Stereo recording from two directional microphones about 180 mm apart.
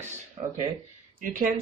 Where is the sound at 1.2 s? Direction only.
50° right (ahead or behind).